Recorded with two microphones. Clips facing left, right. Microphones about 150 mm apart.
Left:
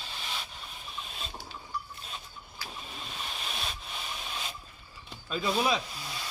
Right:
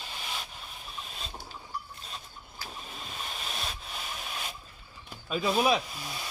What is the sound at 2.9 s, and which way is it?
Rub, centre (ahead or behind).